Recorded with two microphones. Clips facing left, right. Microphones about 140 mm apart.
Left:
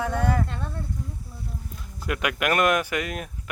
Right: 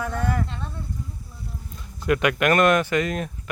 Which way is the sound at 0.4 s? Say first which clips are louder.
Left 1 dB; 55° left (ahead or behind).